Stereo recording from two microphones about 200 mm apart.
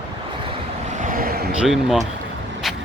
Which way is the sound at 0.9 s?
40° right (ahead or behind).